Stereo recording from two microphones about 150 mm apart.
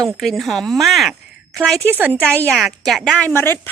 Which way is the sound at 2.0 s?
10° right (ahead or behind).